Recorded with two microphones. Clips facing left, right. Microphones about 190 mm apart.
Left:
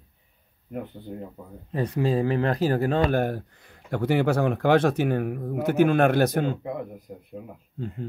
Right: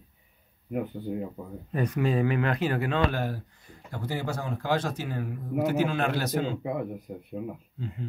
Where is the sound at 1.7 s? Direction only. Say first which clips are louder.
Left 2 dB; 30° left (ahead or behind); by 6.5 s 55° left (ahead or behind).